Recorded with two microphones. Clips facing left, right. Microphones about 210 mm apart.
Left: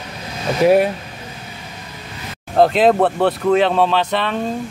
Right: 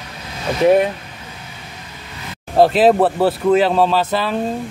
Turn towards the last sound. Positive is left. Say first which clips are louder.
# right 1 dB
turn(degrees=-5)  # may be behind; listen again after turning